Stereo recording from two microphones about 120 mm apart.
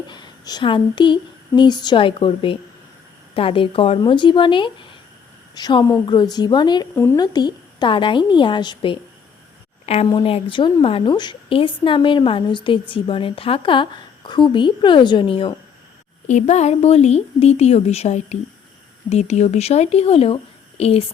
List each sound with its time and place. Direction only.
0.1 s a woman's voice: 35° left (ahead or behind)
6.9 s speech: 15° left (ahead or behind)
7.2 s a woman's voice: 35° left (ahead or behind)
9.8 s a woman's voice: 60° left (ahead or behind)
16.3 s speech: 70° left (ahead or behind)